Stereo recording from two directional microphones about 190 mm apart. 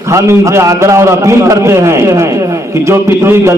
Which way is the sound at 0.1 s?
15° right (ahead or behind).